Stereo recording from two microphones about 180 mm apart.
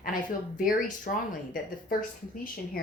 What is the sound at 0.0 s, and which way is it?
A woman's voice, 50° left (ahead or behind).